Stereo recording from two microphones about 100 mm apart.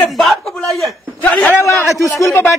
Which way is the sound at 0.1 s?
Centre (ahead or behind).